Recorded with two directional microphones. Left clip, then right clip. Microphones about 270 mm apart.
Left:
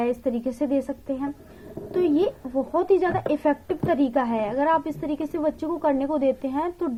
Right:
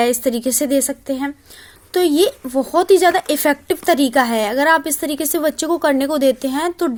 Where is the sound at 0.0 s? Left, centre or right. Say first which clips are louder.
Right 8 dB; right.